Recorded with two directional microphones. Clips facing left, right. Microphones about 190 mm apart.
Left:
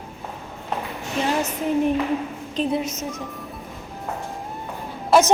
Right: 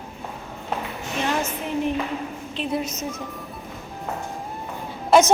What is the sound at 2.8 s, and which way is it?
Speech, 15° right (ahead or behind).